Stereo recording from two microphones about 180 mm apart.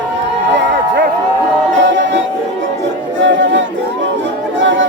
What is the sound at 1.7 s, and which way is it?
Music, 85° right.